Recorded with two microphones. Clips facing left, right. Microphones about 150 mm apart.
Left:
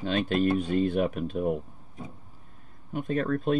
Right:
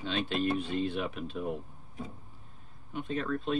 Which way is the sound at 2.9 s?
50° left (ahead or behind).